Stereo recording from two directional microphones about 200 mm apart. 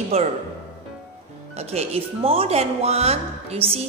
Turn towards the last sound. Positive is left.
turn(degrees=-30)  # may be behind; listen again after turning